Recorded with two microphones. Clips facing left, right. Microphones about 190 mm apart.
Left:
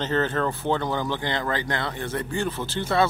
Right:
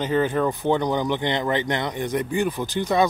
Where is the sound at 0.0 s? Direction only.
10° right (ahead or behind).